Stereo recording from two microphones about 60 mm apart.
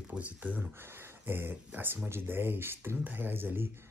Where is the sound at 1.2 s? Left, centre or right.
Right.